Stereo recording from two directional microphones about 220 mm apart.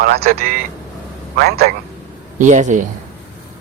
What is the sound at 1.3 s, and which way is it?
Speech, 45° right (ahead or behind).